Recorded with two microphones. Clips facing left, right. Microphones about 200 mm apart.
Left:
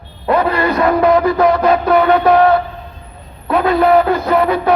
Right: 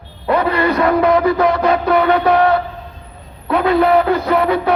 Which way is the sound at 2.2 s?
55° left (ahead or behind).